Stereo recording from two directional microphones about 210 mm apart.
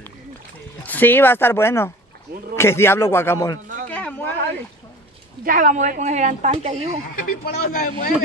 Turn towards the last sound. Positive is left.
turn(degrees=40)  # may be behind; listen again after turning